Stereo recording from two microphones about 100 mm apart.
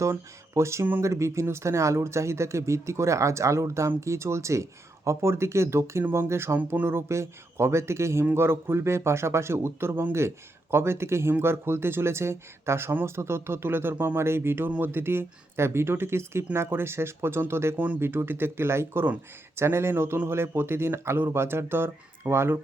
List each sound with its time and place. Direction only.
0.0 s a man's voice: 30° right (ahead or behind)